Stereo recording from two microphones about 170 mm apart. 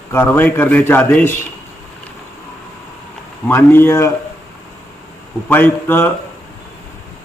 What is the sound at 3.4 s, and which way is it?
Speech, 15° left (ahead or behind).